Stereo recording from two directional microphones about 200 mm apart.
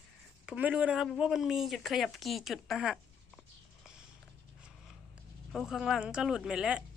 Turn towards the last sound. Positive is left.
turn(degrees=-5)  # may be behind; listen again after turning